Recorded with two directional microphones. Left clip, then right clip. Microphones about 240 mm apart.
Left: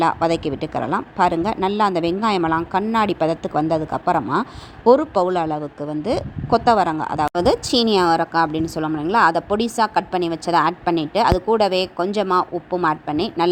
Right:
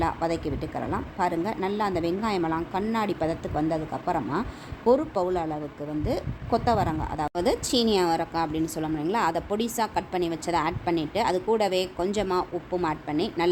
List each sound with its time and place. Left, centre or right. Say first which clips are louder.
0.0 s a woman's voice: left 9 dB; left